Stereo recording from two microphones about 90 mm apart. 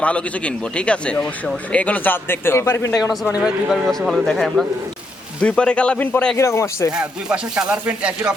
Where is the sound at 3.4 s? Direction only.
5° right (ahead or behind).